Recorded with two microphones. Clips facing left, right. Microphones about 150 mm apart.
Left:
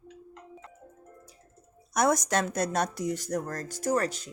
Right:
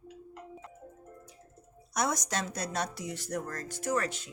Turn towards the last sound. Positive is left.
turn(degrees=40)  # may be behind; listen again after turning